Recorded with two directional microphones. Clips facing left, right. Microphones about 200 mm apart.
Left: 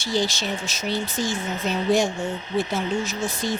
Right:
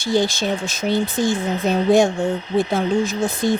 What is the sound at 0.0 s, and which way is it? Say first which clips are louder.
Speech: right 6 dB; 55° right (ahead or behind).